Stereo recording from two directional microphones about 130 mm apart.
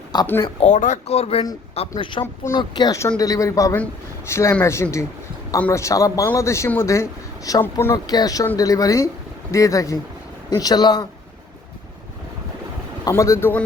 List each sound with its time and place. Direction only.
0.1 s speech: 30° left (ahead or behind)
0.6 s speech: 70° left (ahead or behind)
1.0 s speech: 55° left (ahead or behind)
2.0 s speech: 40° left (ahead or behind)
2.2 s speech: 20° left (ahead or behind)
2.6 s speech: 30° left (ahead or behind)
7.9 s speech: 30° left (ahead or behind)
13.1 s speech: 25° left (ahead or behind)